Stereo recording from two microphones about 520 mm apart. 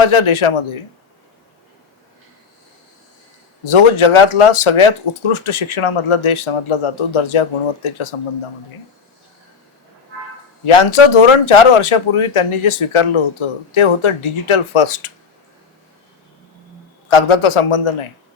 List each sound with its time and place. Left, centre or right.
0.0 s speech: left
3.6 s speech: left
10.7 s speech: left
17.1 s speech: left